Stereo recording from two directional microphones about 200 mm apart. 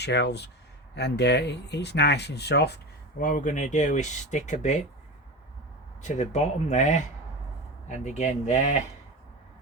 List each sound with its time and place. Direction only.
0.0 s speech: 55° left (ahead or behind); by 4.8 s 35° left (ahead or behind)
6.0 s speech: 35° left (ahead or behind)